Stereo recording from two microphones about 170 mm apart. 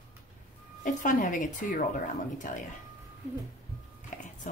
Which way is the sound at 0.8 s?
50° left (ahead or behind).